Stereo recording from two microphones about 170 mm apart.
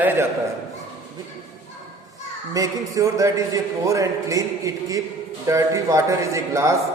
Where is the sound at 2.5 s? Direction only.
20° right (ahead or behind).